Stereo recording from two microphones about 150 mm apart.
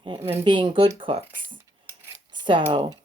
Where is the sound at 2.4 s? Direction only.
30° right (ahead or behind).